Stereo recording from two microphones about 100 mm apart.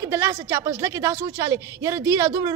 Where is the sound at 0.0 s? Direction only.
25° right (ahead or behind).